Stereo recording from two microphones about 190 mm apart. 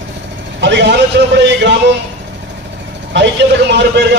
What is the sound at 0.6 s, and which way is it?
Vehicle, 70° right (ahead or behind).